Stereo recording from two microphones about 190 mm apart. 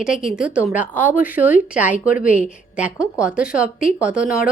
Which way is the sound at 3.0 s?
5° right (ahead or behind).